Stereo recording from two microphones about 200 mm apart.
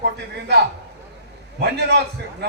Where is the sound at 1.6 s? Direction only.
55° right (ahead or behind).